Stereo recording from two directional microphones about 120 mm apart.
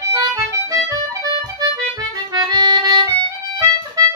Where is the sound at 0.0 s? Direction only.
30° right (ahead or behind).